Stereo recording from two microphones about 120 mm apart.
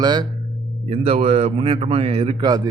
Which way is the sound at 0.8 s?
60° right (ahead or behind).